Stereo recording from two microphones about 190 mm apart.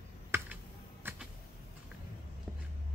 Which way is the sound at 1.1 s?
10° right (ahead or behind).